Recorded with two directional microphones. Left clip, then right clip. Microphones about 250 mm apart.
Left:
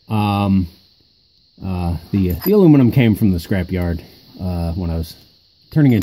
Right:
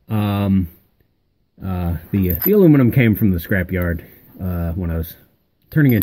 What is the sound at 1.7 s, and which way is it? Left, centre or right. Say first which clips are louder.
Speech: left 1 dB; centre.